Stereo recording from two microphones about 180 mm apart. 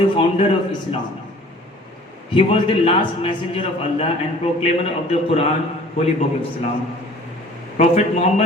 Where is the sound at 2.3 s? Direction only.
30° left (ahead or behind).